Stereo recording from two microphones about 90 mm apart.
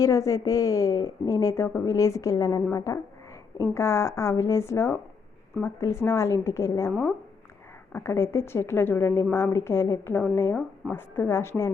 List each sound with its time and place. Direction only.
0.0 s a woman's voice: 40° left (ahead or behind)
7.9 s a woman's voice: 25° left (ahead or behind)